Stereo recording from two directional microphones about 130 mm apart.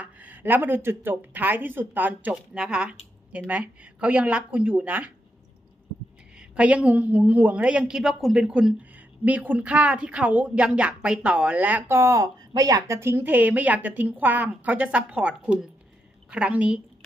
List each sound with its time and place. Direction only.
0.0 s a woman's voice: 10° right (ahead or behind)
6.6 s a woman's voice: 10° right (ahead or behind)